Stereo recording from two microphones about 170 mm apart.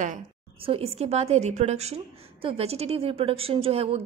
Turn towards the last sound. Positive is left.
turn(degrees=-35)  # may be behind; listen again after turning